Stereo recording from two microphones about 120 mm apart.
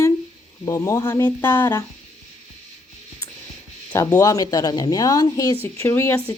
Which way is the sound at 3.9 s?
20° left (ahead or behind).